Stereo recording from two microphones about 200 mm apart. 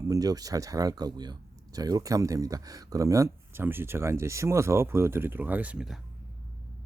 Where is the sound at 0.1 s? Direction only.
20° right (ahead or behind); by 6.0 s 5° right (ahead or behind).